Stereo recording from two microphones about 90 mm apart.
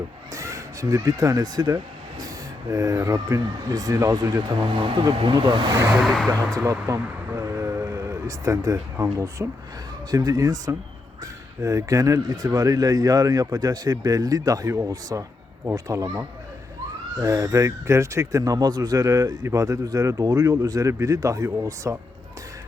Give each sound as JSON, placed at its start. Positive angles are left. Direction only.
{"t": 0.3, "sound": "speech", "side_deg": -35}
{"t": 4.6, "sound": "speech", "side_deg": -70}
{"t": 6.1, "sound": "speech", "side_deg": 10}
{"t": 6.7, "sound": "a sound", "side_deg": -35}
{"t": 9.1, "sound": "speech", "side_deg": -35}